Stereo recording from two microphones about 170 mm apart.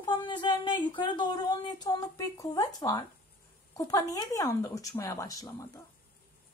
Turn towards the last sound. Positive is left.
turn(degrees=20)  # may be behind; listen again after turning